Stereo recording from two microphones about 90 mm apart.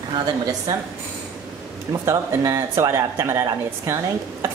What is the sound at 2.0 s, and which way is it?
Speech, 35° right (ahead or behind).